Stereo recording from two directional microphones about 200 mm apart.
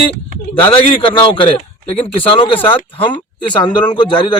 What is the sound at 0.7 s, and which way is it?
Speech, 25° left (ahead or behind).